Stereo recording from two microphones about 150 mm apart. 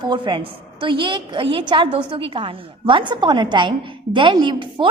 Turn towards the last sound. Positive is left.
turn(degrees=-35)  # may be behind; listen again after turning